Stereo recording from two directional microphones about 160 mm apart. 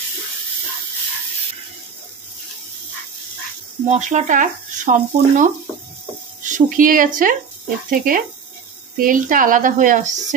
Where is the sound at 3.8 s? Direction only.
45° right (ahead or behind).